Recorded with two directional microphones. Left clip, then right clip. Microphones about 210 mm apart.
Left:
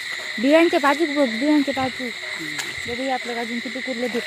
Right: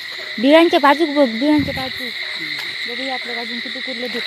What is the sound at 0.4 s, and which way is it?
Speech, 25° right (ahead or behind).